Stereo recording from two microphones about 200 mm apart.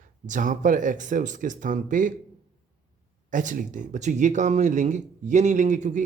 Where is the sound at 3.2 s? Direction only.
40° right (ahead or behind).